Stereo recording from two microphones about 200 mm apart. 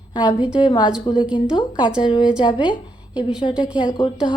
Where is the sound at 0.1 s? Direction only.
20° left (ahead or behind).